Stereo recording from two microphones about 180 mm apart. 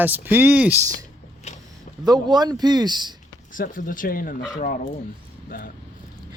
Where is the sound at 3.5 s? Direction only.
50° left (ahead or behind).